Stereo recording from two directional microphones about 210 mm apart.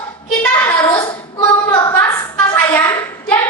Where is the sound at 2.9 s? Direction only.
15° left (ahead or behind).